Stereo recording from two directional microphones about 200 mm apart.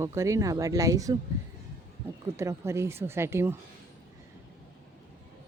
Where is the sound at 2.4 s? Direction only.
15° right (ahead or behind).